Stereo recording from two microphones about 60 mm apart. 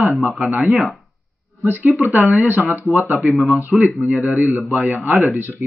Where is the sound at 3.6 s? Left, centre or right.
Right.